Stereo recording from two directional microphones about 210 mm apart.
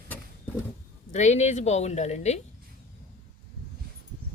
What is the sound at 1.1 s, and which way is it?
Speech, 35° left (ahead or behind).